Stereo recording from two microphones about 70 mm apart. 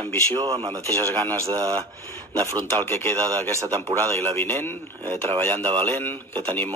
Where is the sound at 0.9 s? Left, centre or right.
Left.